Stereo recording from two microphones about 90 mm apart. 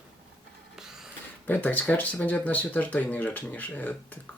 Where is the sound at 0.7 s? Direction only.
5° right (ahead or behind).